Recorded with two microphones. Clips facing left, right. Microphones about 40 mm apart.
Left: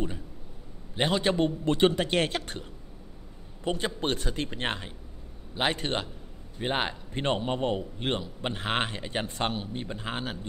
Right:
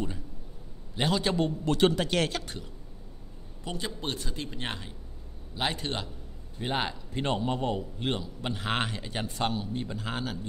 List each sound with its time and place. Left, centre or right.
0.9 s a man's voice: left
6.6 s a man's voice: left
9.8 s a man's voice: left